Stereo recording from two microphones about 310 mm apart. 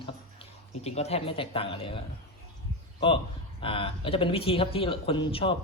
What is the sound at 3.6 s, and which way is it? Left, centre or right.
A man's voice, centre.